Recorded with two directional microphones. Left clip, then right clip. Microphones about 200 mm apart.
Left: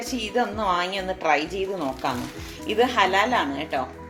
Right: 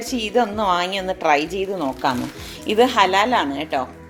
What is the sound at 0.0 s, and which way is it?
Speech, 45° right (ahead or behind).